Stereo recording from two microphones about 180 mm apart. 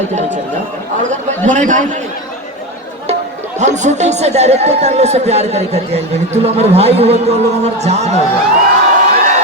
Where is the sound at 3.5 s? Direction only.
40° right (ahead or behind).